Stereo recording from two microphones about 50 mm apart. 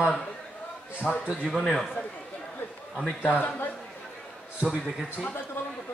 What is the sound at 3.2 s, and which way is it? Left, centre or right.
Speech, left.